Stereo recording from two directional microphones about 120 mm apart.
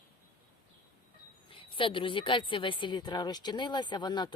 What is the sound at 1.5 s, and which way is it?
A woman's voice, 45° left (ahead or behind).